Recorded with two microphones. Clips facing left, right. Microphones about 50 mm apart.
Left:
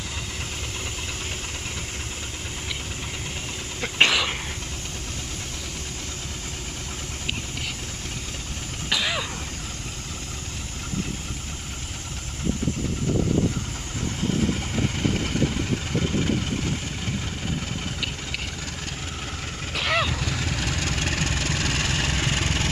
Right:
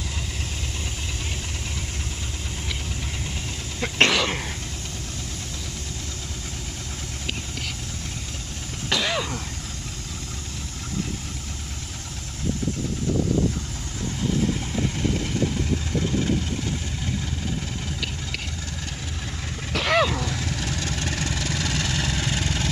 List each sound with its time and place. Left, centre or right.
4.0 s throat clearing: centre
8.8 s cough: centre
14.6 s vehicle: left
19.7 s vehicle: centre
20.2 s vehicle: left